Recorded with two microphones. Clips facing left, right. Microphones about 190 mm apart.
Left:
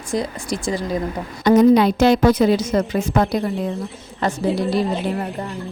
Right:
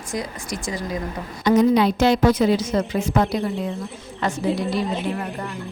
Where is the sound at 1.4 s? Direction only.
50° left (ahead or behind).